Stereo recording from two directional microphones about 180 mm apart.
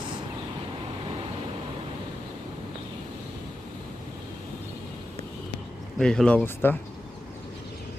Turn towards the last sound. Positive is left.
turn(degrees=10)  # may be behind; listen again after turning